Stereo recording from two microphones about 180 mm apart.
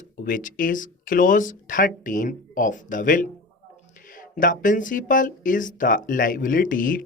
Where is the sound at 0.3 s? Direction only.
50° left (ahead or behind).